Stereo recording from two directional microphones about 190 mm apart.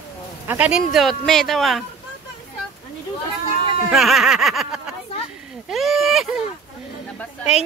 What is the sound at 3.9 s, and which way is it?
Speech, centre (ahead or behind).